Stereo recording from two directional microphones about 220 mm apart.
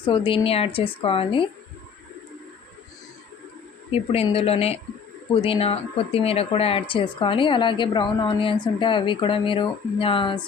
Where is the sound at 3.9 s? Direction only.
25° left (ahead or behind).